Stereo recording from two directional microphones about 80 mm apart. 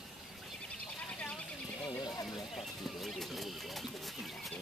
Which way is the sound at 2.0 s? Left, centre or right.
Left.